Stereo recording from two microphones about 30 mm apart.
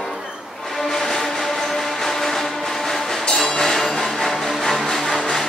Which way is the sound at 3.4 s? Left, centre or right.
Left.